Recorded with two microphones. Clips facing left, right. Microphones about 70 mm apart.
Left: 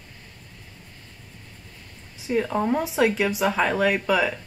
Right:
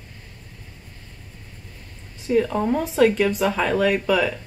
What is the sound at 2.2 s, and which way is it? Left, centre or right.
A woman's voice, centre.